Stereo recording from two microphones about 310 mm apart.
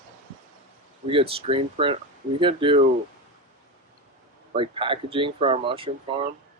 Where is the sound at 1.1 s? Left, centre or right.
Centre.